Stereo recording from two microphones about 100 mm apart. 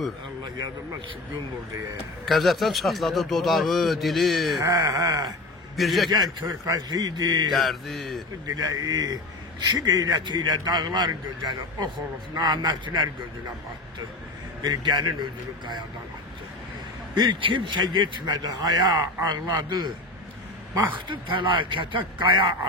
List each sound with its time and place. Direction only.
2.2 s a man's voice: centre (ahead or behind)
4.6 s a sound: 40° right (ahead or behind)
5.8 s a man's voice: centre (ahead or behind)
6.1 s a sound: 40° right (ahead or behind)
6.9 s a man's voice: 40° right (ahead or behind)
7.5 s a man's voice: centre (ahead or behind)
8.5 s a sound: 35° right (ahead or behind)
9.7 s a man's voice: 40° right (ahead or behind)
14.6 s a man's voice: 45° right (ahead or behind)
17.1 s a man's voice: 55° right (ahead or behind)
20.9 s a man's voice: 55° right (ahead or behind)